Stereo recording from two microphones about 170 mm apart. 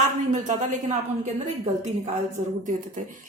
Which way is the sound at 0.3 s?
45° right (ahead or behind).